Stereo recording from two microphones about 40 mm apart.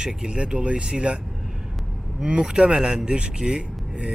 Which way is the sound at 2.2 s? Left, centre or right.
Right.